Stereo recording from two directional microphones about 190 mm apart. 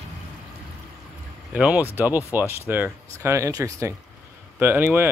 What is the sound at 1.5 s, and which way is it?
Speech, 5° right (ahead or behind).